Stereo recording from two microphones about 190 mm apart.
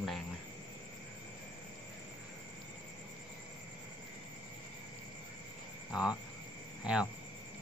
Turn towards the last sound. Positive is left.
turn(degrees=-5)  # may be behind; listen again after turning